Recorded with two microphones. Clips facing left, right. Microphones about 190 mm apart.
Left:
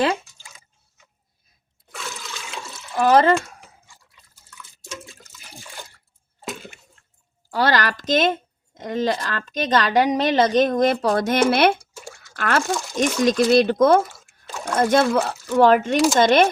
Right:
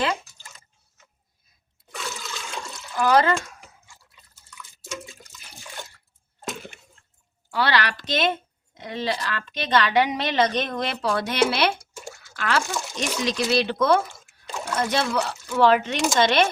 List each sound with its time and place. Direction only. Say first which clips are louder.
0.3 s drip: even; 10° left (ahead or behind)
1.9 s toilet flush: right 1 dB; centre (ahead or behind)
3.0 s speech: left 4 dB; 30° left (ahead or behind)
4.5 s drip: right 1 dB; centre (ahead or behind)
7.5 s a woman's voice: left 3 dB; 45° left (ahead or behind)
14.1 s a sound: even; 5° left (ahead or behind)
14.7 s a woman's voice: left 7 dB; 50° left (ahead or behind)